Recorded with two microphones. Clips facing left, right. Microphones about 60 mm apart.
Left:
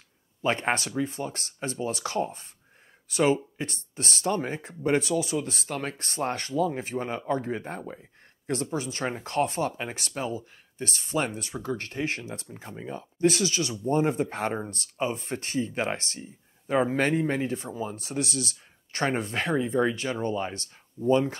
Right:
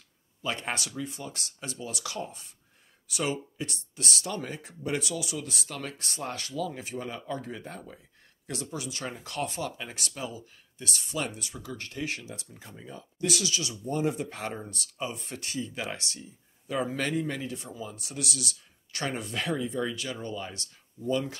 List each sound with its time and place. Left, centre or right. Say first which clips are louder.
0.4 s speech: left 7 dB; left